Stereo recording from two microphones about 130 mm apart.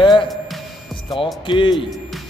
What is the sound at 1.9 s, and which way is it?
Music, centre (ahead or behind).